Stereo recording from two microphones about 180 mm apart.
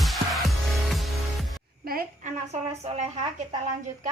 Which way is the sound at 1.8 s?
50° right (ahead or behind).